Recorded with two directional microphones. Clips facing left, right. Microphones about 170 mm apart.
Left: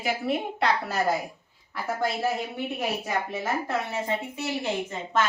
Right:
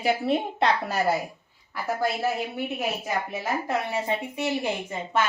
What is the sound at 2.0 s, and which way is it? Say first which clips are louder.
A woman's voice: even; 5° right (ahead or behind).